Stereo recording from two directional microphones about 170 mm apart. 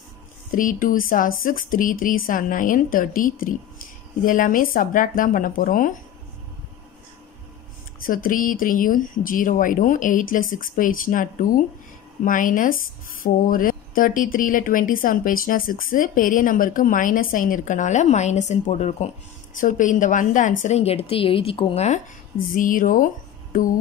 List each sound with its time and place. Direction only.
0.5 s a woman's voice: 55° left (ahead or behind)
8.0 s a woman's voice: 55° left (ahead or behind)
22.5 s speech: 55° left (ahead or behind)